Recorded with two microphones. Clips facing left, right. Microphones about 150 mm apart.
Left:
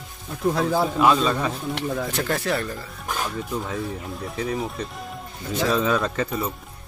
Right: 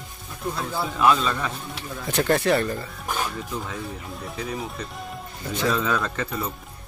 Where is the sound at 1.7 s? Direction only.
85° left.